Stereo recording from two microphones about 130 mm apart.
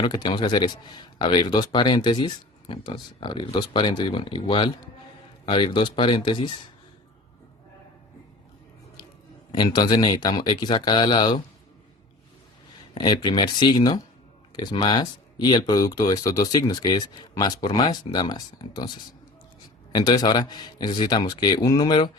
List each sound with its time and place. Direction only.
0.0 s a man's voice: 35° left (ahead or behind)
9.5 s a man's voice: 35° left (ahead or behind)
12.9 s a man's voice: 35° left (ahead or behind)
19.9 s a man's voice: 35° left (ahead or behind)